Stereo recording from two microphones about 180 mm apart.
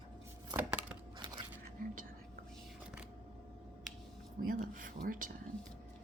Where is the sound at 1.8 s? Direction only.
50° right (ahead or behind).